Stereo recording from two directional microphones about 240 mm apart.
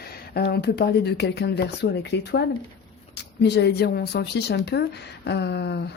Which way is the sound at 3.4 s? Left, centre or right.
Left.